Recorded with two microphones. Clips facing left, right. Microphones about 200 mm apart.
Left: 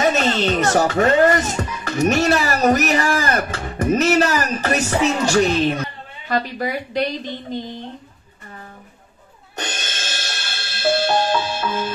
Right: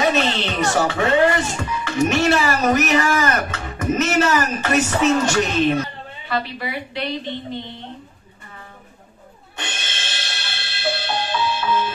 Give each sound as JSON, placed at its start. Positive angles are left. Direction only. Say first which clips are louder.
{"t": 0.0, "sound": "speech", "louder": "left 2 dB", "side_deg": 45}
{"t": 9.6, "sound": "music", "louder": "left 3 dB", "side_deg": 40}